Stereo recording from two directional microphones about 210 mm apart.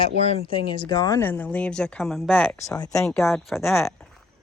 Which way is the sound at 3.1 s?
5° left (ahead or behind).